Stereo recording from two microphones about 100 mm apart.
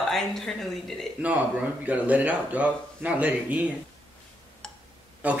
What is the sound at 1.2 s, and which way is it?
Speech, 10° right (ahead or behind).